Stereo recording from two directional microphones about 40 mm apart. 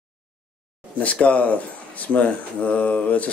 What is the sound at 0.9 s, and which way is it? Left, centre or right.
Speech, left.